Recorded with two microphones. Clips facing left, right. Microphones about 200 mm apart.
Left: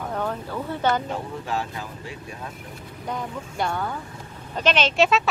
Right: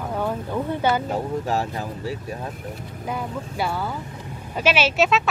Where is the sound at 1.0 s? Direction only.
40° right (ahead or behind).